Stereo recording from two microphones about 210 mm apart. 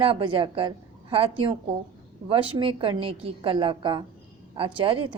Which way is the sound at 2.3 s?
25° right (ahead or behind).